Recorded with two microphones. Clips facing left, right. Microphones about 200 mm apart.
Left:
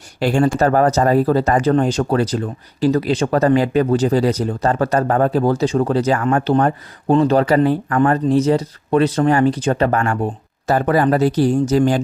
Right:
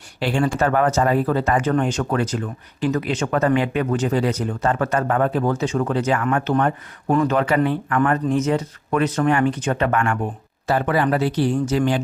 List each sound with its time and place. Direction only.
0.2 s speech: 45° left (ahead or behind)